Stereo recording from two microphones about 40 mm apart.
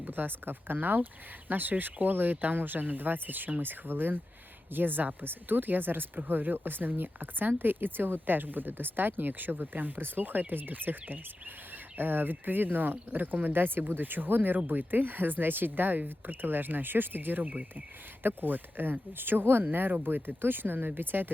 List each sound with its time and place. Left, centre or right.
0.1 s speech: right